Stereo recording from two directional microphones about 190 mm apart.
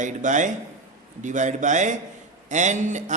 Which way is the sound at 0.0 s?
40° right (ahead or behind).